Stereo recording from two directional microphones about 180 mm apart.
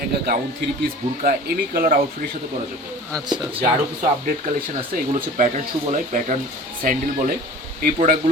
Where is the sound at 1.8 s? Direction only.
50° right (ahead or behind).